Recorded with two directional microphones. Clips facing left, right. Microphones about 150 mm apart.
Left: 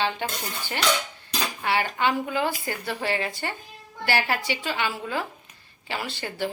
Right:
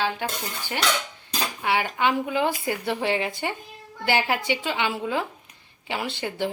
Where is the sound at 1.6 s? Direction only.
15° right (ahead or behind).